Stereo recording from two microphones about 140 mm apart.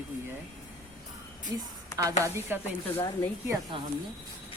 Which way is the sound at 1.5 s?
25° right (ahead or behind).